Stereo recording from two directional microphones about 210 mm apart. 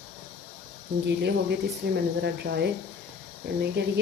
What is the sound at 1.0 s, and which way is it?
Speech, 55° right (ahead or behind).